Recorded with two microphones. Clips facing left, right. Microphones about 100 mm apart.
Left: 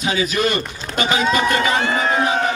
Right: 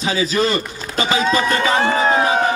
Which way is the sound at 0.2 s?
30° right (ahead or behind).